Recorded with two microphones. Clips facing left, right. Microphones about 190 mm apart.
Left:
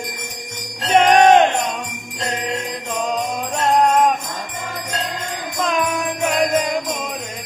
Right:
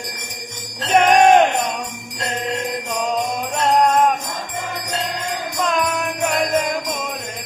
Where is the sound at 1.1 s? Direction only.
10° right (ahead or behind).